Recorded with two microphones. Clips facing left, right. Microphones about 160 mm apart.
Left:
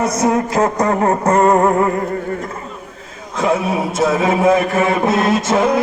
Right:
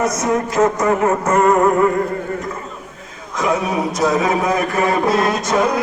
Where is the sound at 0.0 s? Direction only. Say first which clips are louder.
Left 2 dB; 30° left (ahead or behind).